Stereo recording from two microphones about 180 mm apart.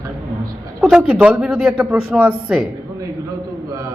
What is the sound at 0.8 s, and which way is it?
Speech, 5° right (ahead or behind).